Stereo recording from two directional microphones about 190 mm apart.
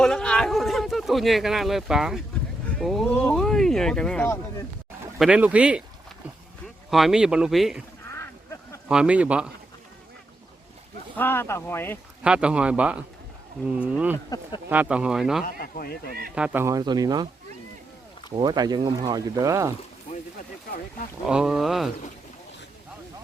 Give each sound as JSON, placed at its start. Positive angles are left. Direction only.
{"t": 0.0, "sound": "a sound", "side_deg": 5}
{"t": 2.7, "sound": "speech", "side_deg": 0}
{"t": 5.2, "sound": "speech", "side_deg": -5}
{"t": 6.9, "sound": "speech", "side_deg": 0}
{"t": 8.9, "sound": "speech", "side_deg": -5}
{"t": 11.2, "sound": "speech", "side_deg": 10}
{"t": 12.2, "sound": "speech", "side_deg": -5}
{"t": 14.3, "sound": "speech", "side_deg": 20}
{"t": 14.7, "sound": "speech", "side_deg": -5}
{"t": 15.4, "sound": "speech", "side_deg": 50}
{"t": 16.3, "sound": "speech", "side_deg": -5}
{"t": 18.3, "sound": "speech", "side_deg": -20}
{"t": 21.2, "sound": "speech", "side_deg": -5}